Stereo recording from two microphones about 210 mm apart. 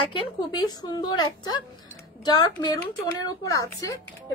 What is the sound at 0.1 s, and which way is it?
A woman's voice, 20° left (ahead or behind).